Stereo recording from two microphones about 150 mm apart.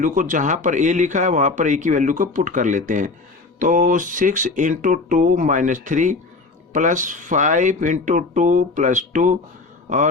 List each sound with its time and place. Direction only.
0.0 s speech: 60° right (ahead or behind)